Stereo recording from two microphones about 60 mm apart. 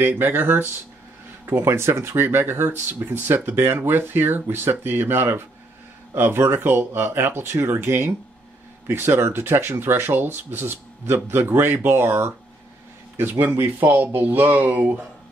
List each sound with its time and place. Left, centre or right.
0.0 s speech: right